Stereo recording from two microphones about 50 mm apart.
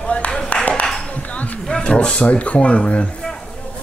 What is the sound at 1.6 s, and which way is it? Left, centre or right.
Speech, left.